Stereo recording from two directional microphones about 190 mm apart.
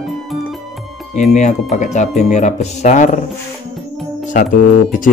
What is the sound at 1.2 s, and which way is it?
Speech, 40° left (ahead or behind).